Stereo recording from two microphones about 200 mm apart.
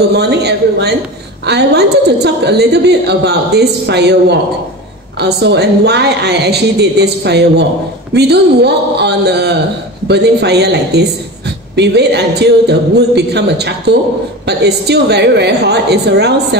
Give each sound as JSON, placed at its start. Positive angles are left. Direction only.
{"t": 0.1, "sound": "a woman's voice", "side_deg": -55}